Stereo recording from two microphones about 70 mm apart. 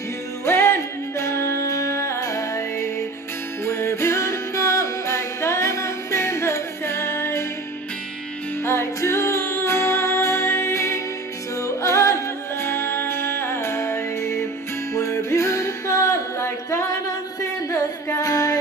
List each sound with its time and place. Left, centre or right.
0.5 s music: left
8.6 s music: left
12.6 s music: left